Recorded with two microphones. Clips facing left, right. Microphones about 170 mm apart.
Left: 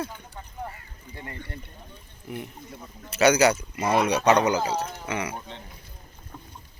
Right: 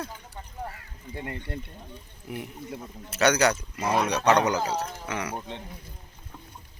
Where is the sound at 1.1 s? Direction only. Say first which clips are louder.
Right 5 dB; 15° right (ahead or behind).